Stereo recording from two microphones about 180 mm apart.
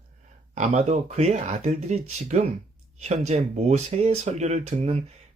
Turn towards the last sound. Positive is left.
turn(degrees=-35)  # may be behind; listen again after turning